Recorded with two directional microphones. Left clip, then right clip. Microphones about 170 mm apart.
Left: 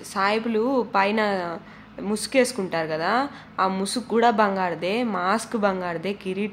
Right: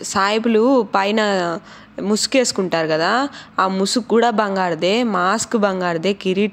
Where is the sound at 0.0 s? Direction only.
45° right (ahead or behind).